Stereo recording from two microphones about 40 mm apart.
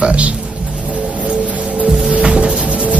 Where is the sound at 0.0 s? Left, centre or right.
Right.